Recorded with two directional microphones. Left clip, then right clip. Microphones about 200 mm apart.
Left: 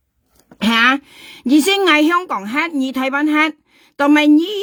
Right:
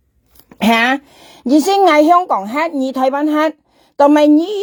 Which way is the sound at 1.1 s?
50° left (ahead or behind).